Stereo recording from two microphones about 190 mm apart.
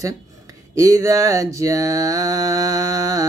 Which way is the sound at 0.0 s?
15° right (ahead or behind).